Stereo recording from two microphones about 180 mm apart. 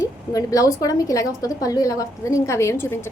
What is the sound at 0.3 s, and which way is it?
A woman's voice, 20° left (ahead or behind).